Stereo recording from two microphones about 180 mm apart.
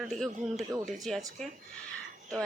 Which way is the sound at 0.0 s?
Centre (ahead or behind).